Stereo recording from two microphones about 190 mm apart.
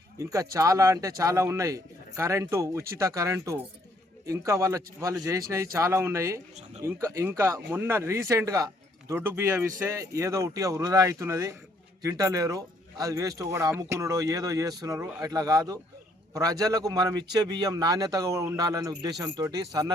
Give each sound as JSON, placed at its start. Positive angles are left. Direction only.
{"t": 0.2, "sound": "speech", "side_deg": -15}